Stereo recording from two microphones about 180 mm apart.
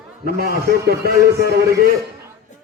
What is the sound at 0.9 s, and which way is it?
A man's voice, 60° right (ahead or behind).